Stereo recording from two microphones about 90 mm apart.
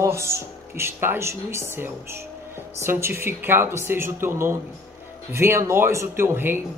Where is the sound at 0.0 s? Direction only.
30° right (ahead or behind).